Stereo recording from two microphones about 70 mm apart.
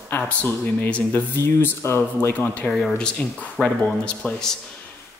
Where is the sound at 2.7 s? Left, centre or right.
Centre.